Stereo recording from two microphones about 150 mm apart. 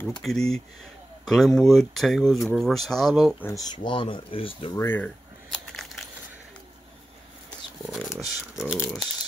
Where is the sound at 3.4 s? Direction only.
25° left (ahead or behind).